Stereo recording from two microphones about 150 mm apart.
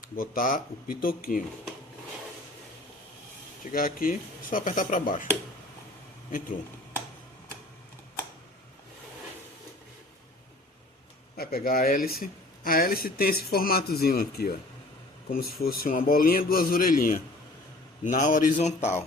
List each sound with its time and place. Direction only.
0.2 s a man's voice: 65° left (ahead or behind)
3.7 s speech: 70° left (ahead or behind)
11.3 s a man's voice: 75° left (ahead or behind); by 18.9 s 55° left (ahead or behind)